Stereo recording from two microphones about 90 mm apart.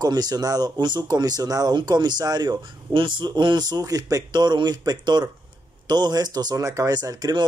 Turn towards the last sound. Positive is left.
turn(degrees=-45)  # may be behind; listen again after turning